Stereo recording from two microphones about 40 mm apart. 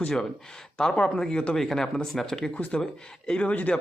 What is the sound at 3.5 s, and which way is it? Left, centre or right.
Speech, left.